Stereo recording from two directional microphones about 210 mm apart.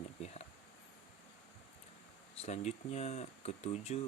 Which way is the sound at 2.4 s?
30° left (ahead or behind).